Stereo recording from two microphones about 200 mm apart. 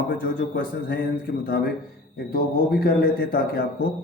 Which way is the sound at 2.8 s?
50° left (ahead or behind).